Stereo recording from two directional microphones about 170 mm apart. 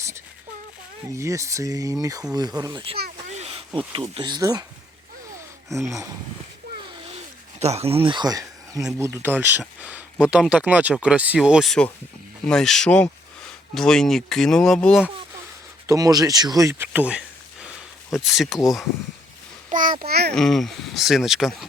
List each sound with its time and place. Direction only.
1.1 s speech: 15° right (ahead or behind)
3.2 s a sound: 40° right (ahead or behind)
3.9 s speech: 30° right (ahead or behind)
7.6 s speech: 40° right (ahead or behind); by 15.0 s 5° left (ahead or behind)
15.9 s speech: 20° right (ahead or behind); by 18.9 s centre (ahead or behind)
19.7 s a child's voice: 50° right (ahead or behind)
20.1 s a child's voice: 70° right (ahead or behind)
20.3 s speech: centre (ahead or behind)